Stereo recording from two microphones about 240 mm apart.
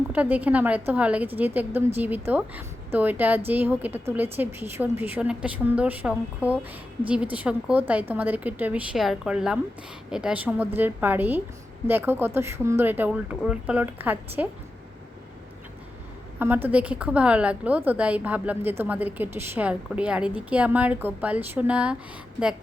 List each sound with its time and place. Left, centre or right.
0.1 s a woman's voice: centre
16.4 s a woman's voice: centre